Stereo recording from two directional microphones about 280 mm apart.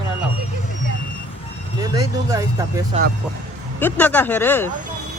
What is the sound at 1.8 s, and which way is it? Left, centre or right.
Speech, centre.